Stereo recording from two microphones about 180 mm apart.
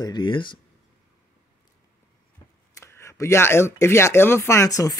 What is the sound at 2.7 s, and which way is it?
Speech, 15° left (ahead or behind).